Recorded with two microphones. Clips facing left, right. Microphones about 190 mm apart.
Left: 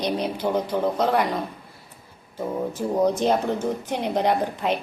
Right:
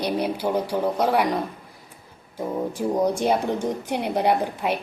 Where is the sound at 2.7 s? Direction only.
10° right (ahead or behind).